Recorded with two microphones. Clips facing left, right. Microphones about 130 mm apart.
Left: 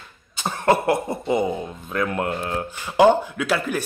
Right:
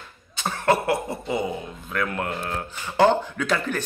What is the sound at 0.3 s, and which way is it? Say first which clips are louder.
Speech: left 2 dB; 15° left (ahead or behind).